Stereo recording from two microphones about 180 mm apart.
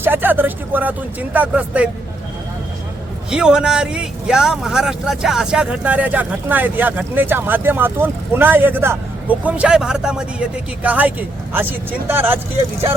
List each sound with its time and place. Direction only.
0.0 s a man's voice: 10° right (ahead or behind)
3.2 s a man's voice: 5° right (ahead or behind)